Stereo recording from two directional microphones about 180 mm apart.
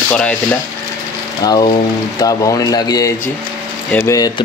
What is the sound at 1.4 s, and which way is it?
Speech, 20° left (ahead or behind).